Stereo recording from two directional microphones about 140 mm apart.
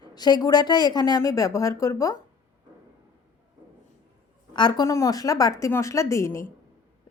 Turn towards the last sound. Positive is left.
turn(degrees=20)  # may be behind; listen again after turning